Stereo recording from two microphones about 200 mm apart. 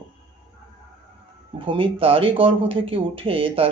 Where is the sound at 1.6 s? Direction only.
25° right (ahead or behind).